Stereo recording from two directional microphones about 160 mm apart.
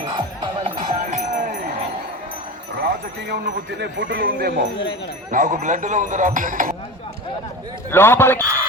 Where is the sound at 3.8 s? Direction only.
90° right.